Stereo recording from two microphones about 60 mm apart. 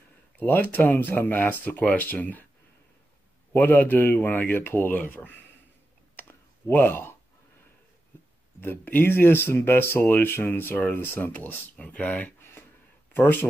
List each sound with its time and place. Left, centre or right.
0.4 s speech: left
3.5 s speech: left
6.7 s speech: left
8.5 s speech: left
10.8 s speech: left
11.1 s speech: left
11.8 s speech: left